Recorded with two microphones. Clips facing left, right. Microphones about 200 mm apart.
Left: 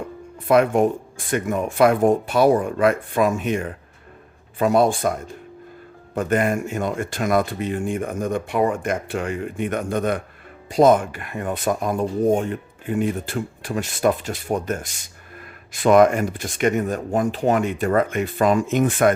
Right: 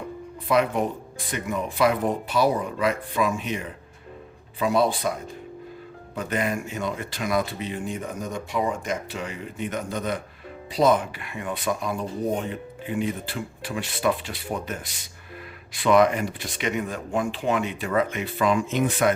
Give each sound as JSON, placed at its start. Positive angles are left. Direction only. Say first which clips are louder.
{"t": 0.4, "sound": "speech", "louder": "left 6 dB", "side_deg": 50}
{"t": 6.1, "sound": "speech", "louder": "left 6 dB", "side_deg": 50}